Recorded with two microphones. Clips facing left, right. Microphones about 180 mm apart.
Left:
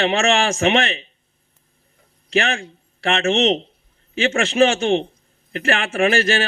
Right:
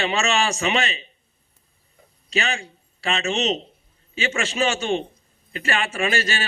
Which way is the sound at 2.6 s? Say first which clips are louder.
Left 5 dB; 60° left (ahead or behind).